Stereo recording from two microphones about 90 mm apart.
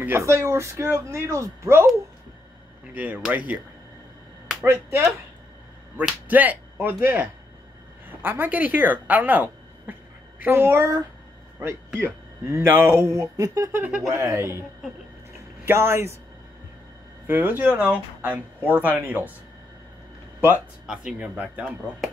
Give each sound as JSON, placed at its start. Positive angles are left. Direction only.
{"t": 0.2, "sound": "speech", "side_deg": -35}
{"t": 2.9, "sound": "speech", "side_deg": -20}
{"t": 4.6, "sound": "speech", "side_deg": -30}
{"t": 6.2, "sound": "speech", "side_deg": -20}
{"t": 14.1, "sound": "speech", "side_deg": -35}
{"t": 15.3, "sound": "a sound", "side_deg": -25}
{"t": 17.3, "sound": "speech", "side_deg": -20}
{"t": 20.3, "sound": "speech", "side_deg": -25}
{"t": 20.8, "sound": "speech", "side_deg": -5}